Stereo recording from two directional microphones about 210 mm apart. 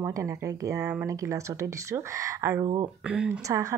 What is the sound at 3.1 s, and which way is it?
Speech, 5° right (ahead or behind).